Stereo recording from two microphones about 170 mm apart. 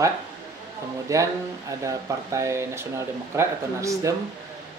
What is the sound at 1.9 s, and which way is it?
Speech, 15° right (ahead or behind).